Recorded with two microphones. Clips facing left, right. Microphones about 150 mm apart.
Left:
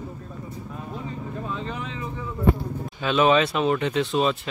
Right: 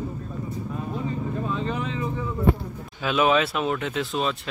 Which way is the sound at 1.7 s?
35° right (ahead or behind).